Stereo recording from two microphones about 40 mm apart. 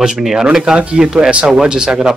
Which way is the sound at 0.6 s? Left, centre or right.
Right.